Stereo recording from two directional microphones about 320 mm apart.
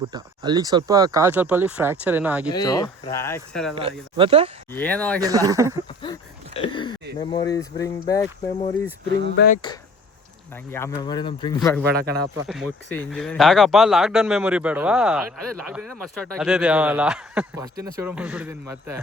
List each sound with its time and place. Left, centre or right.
0.0 s speech: centre
2.5 s speech: centre
3.8 s speech: centre
4.7 s speech: centre
5.2 s speech: centre
6.0 s a sound: centre
7.2 s speech: centre
9.3 s speech: left
10.7 s speech: centre